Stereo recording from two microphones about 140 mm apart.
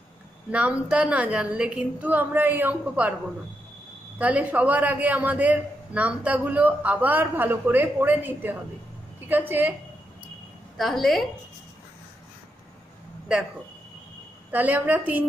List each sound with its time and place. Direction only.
0.5 s a man's voice: 10° right (ahead or behind)
4.2 s a man's voice: 10° right (ahead or behind)
10.8 s a woman's voice: centre (ahead or behind)
14.5 s a man's voice: 10° right (ahead or behind)